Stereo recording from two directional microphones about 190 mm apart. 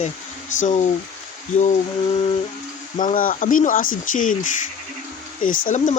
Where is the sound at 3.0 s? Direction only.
45° left (ahead or behind).